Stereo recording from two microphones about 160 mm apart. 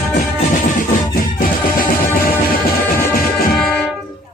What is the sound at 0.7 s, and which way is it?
Music, 60° left (ahead or behind).